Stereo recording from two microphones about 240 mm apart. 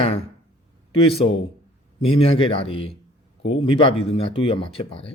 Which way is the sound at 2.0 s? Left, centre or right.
Left.